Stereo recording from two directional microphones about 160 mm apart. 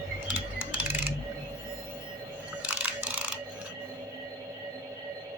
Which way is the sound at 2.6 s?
10° right (ahead or behind).